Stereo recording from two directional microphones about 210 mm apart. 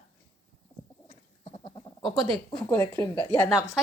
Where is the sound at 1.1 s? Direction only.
25° left (ahead or behind).